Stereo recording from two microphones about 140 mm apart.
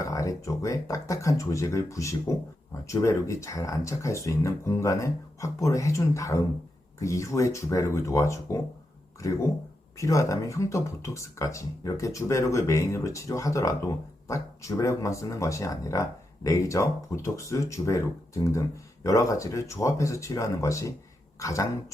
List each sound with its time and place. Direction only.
0.0 s speech: 25° left (ahead or behind)
19.0 s speech: 25° left (ahead or behind)